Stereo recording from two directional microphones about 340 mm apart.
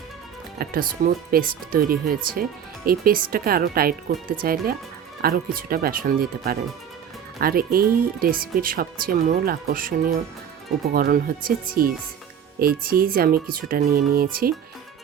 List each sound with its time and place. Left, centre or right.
0.6 s speech: right